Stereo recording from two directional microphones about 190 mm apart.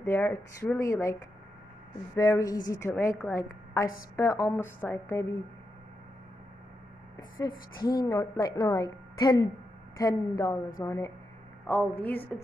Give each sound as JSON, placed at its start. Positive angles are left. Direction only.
{"t": 0.0, "sound": "a woman's voice", "side_deg": 10}
{"t": 2.1, "sound": "a woman's voice", "side_deg": 15}
{"t": 7.2, "sound": "a woman's voice", "side_deg": 20}